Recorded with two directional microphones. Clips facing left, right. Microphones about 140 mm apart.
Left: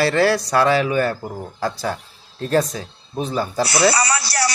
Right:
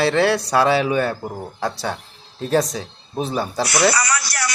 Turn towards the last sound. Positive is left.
turn(degrees=30)  # may be behind; listen again after turning